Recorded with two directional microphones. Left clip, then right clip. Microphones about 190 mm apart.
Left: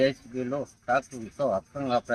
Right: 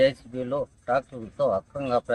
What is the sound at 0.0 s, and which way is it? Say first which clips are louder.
Speech: right 3 dB; 25° right (ahead or behind).